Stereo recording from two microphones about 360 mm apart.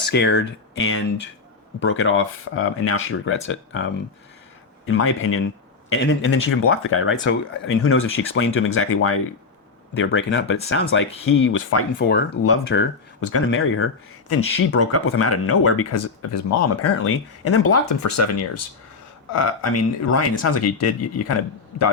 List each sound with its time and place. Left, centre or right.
0.1 s speech: left